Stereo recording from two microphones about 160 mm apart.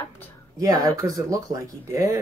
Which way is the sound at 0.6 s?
20° right (ahead or behind).